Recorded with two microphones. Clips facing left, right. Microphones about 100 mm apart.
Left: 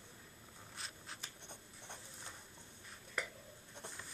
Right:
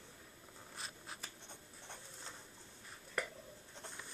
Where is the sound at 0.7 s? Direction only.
Centre (ahead or behind).